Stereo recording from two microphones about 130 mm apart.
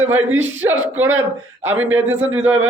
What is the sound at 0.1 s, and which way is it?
A man's voice, 15° right (ahead or behind).